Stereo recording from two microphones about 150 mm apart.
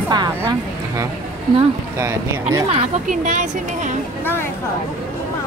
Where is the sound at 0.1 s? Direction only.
25° right (ahead or behind).